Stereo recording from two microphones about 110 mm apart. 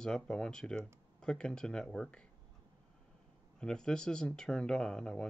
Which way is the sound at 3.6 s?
5° left (ahead or behind).